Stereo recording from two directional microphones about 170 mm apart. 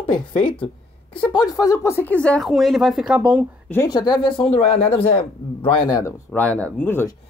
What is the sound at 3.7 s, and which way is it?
A woman's voice, 20° left (ahead or behind).